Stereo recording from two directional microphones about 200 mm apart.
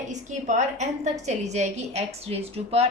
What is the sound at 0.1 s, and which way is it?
A woman's voice, 35° right (ahead or behind).